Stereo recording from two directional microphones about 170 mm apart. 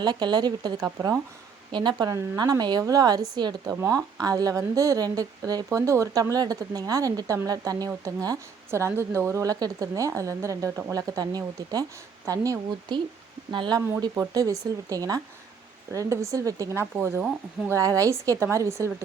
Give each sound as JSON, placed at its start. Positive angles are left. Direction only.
{"t": 0.0, "sound": "a woman's voice", "side_deg": -25}
{"t": 1.7, "sound": "a woman's voice", "side_deg": -25}